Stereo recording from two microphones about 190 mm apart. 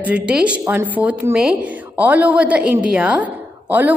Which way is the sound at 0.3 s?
5° right (ahead or behind).